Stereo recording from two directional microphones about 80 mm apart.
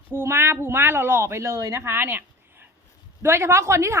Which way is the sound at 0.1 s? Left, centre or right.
Right.